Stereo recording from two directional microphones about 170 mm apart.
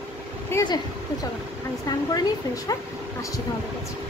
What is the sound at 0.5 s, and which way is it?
Speech, 25° left (ahead or behind).